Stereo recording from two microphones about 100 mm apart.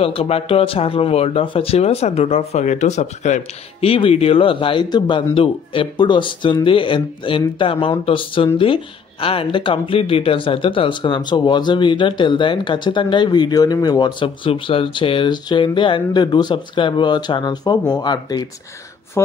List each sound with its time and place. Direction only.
0.0 s speech: 75° left (ahead or behind); by 3.1 s 90° left
3.8 s speech: 70° left (ahead or behind)
4.8 s speech: 50° left (ahead or behind)
19.2 s speech: 30° left (ahead or behind)